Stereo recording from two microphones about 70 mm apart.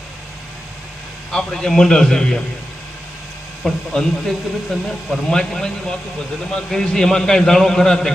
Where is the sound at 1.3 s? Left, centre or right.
Centre.